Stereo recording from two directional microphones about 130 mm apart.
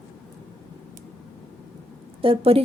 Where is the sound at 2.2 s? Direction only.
45° right (ahead or behind).